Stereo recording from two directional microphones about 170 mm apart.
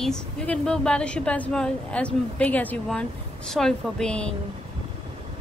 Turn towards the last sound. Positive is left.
turn(degrees=5)  # may be behind; listen again after turning